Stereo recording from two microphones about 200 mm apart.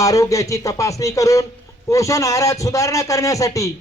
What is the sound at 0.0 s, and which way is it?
Speech, 15° left (ahead or behind).